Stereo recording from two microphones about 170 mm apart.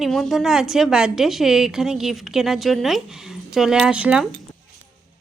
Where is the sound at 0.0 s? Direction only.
Centre (ahead or behind).